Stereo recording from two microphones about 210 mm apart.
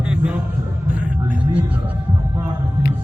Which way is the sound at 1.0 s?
5° right (ahead or behind).